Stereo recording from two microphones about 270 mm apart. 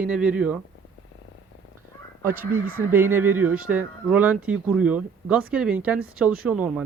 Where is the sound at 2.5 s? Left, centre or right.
Right.